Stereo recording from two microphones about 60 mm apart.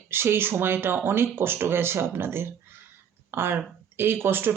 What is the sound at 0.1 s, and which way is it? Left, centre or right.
Speech, right.